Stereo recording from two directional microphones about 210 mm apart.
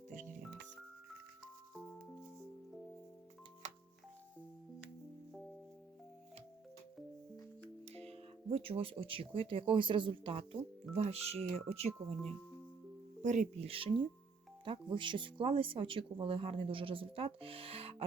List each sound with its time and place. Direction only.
7.9 s speech: 30° right (ahead or behind)
13.2 s speech: 35° right (ahead or behind)